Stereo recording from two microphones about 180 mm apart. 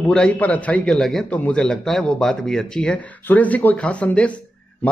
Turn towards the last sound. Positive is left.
turn(degrees=5)  # may be behind; listen again after turning